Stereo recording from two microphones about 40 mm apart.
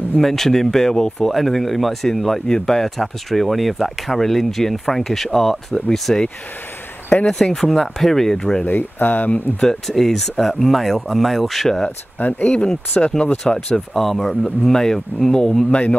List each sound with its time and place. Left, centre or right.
0.2 s speech: centre
2.4 s speech: centre
8.6 s speech: left
9.8 s speech: centre
12.2 s speech: left
13.0 s speech: centre